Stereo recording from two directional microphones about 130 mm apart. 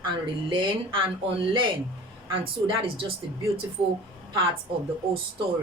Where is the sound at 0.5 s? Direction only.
40° right (ahead or behind).